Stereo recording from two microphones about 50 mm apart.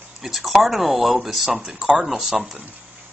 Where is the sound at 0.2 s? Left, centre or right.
Centre.